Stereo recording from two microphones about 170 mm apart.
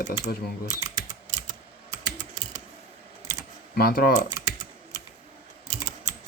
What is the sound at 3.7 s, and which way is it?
Speech, 65° left (ahead or behind).